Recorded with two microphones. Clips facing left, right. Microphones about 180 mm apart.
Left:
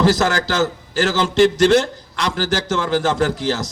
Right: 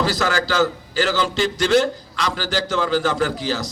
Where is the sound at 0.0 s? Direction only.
45° left (ahead or behind).